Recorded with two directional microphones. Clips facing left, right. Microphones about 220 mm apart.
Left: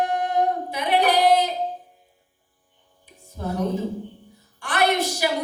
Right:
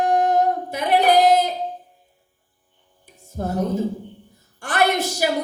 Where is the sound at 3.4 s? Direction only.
45° right (ahead or behind).